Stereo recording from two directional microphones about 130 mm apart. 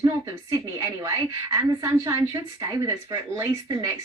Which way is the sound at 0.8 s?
25° right (ahead or behind).